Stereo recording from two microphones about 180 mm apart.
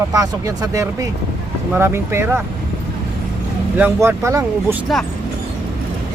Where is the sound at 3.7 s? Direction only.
10° right (ahead or behind).